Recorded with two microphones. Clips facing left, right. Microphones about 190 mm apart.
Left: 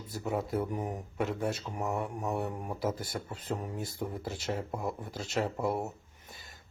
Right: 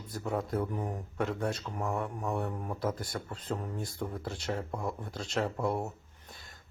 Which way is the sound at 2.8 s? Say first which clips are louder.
Left 1 dB; 5° left (ahead or behind).